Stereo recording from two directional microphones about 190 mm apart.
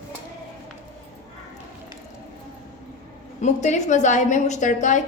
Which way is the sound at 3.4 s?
40° left (ahead or behind).